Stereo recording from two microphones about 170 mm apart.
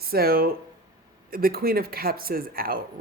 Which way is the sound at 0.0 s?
65° right (ahead or behind).